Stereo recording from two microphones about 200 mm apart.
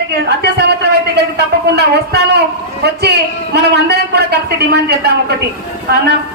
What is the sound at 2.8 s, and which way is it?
A man's voice, 55° right (ahead or behind).